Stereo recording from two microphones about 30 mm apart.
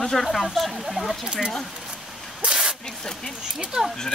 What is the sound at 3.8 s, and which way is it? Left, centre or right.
Speech, right.